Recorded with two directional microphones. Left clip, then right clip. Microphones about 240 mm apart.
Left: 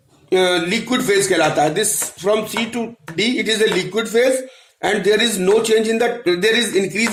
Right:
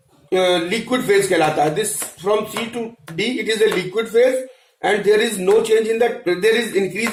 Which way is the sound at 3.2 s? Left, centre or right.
Left.